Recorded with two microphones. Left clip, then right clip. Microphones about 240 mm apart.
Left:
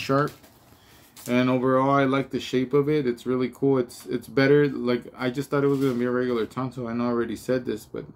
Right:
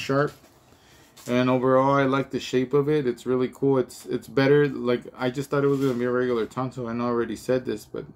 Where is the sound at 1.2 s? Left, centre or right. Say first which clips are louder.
Right 1 dB; centre.